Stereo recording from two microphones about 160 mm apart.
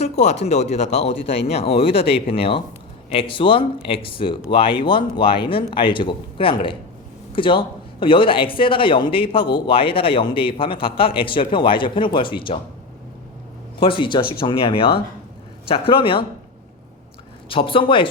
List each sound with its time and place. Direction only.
0.0 s a man's voice: 45° left (ahead or behind)
13.7 s a man's voice: 30° left (ahead or behind)
17.5 s a man's voice: 35° left (ahead or behind)